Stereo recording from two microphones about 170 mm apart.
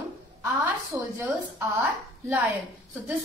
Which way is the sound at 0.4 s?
15° right (ahead or behind).